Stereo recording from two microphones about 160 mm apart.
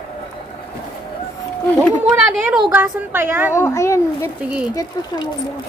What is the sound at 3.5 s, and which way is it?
Speech, 15° left (ahead or behind).